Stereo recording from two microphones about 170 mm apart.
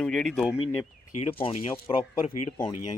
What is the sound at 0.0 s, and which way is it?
Speech, 5° left (ahead or behind).